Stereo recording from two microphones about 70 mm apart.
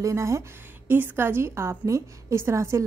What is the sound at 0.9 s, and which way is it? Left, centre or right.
A woman's voice, right.